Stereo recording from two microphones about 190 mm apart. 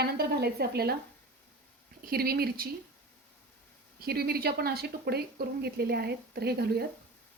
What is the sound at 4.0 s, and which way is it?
A woman's voice, 55° right (ahead or behind).